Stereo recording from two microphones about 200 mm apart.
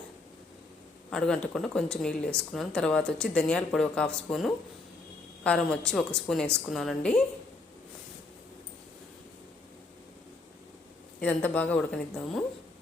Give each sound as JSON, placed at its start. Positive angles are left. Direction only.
{"t": 1.1, "sound": "speech", "side_deg": 5}
{"t": 11.2, "sound": "a woman's voice", "side_deg": 5}